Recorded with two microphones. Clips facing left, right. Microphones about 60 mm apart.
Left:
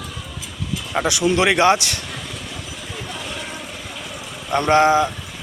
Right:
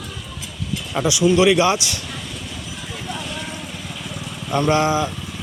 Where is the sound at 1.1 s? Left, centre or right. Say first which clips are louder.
Right 3 dB; left.